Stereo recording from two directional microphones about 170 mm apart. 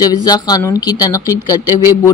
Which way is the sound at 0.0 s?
25° left (ahead or behind).